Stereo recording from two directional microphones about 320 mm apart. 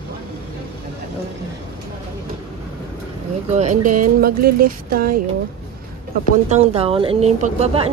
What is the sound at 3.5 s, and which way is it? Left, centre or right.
Speech, right.